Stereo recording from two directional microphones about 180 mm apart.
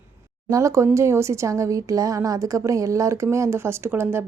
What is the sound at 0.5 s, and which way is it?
Speech, 15° right (ahead or behind).